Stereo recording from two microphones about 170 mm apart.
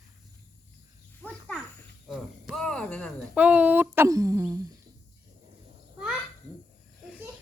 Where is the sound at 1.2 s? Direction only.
5° left (ahead or behind).